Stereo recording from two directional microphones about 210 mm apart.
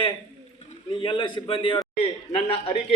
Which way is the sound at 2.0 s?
25° left (ahead or behind).